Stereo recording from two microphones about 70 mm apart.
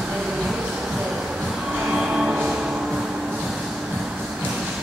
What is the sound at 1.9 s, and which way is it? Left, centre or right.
Train, centre.